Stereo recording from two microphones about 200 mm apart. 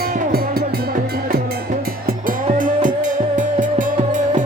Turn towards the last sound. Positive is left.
turn(degrees=-40)  # may be behind; listen again after turning